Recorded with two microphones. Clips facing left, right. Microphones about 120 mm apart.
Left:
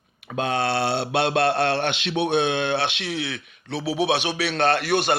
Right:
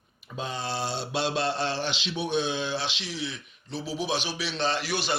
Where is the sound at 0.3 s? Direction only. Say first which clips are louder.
Left 9 dB; 65° left (ahead or behind).